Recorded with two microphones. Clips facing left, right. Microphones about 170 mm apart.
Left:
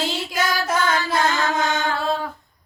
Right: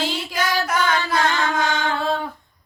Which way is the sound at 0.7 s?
25° left (ahead or behind).